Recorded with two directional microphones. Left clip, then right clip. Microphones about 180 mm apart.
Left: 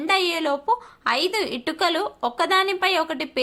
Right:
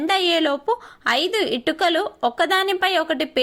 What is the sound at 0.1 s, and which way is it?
A woman's voice, 20° right (ahead or behind).